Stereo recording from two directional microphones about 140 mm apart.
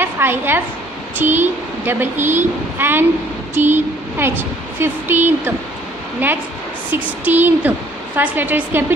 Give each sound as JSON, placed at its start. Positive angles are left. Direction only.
{"t": 0.0, "sound": "a woman's voice", "side_deg": -15}
{"t": 6.9, "sound": "a woman's voice", "side_deg": -15}